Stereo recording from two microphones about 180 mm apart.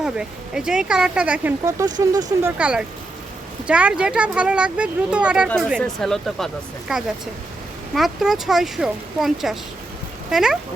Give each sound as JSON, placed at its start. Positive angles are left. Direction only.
{"t": 0.0, "sound": "speech", "side_deg": -5}
{"t": 1.6, "sound": "speech", "side_deg": -20}
{"t": 2.6, "sound": "speech", "side_deg": -5}